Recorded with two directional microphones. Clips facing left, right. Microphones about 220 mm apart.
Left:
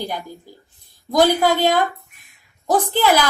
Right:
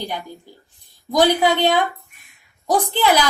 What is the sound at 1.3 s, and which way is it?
Speech, 20° right (ahead or behind).